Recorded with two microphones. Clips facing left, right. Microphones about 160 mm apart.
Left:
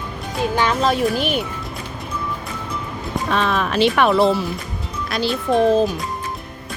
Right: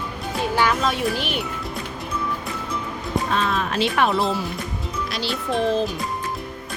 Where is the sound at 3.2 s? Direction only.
75° left (ahead or behind).